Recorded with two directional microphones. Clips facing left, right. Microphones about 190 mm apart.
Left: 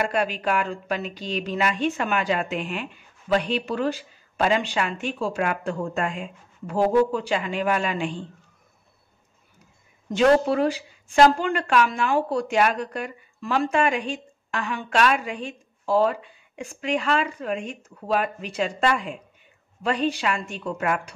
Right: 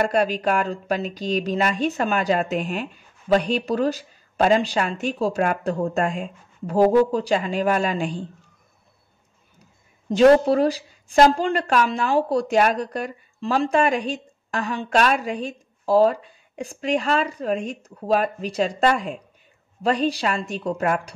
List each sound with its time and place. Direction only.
0.1 s speech: 40° right (ahead or behind)
10.0 s speech: 35° right (ahead or behind)